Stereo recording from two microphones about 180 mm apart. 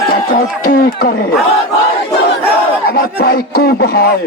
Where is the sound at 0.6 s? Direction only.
50° left (ahead or behind).